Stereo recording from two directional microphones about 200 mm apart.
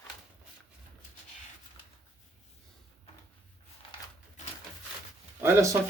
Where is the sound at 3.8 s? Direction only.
25° left (ahead or behind).